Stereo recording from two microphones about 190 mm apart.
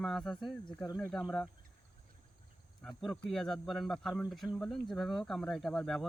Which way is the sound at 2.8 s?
Centre (ahead or behind).